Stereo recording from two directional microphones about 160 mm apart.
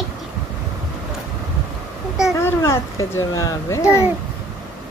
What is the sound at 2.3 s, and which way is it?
A child's voice, 15° left (ahead or behind).